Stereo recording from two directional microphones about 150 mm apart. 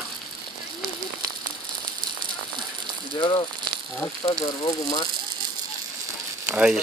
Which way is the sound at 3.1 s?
35° left (ahead or behind).